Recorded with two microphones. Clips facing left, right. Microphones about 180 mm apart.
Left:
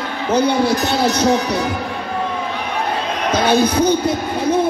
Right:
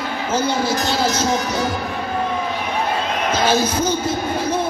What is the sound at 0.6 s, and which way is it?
Speech, 65° left (ahead or behind).